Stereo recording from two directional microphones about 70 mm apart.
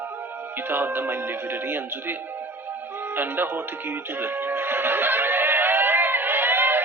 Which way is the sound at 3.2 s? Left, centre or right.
Right.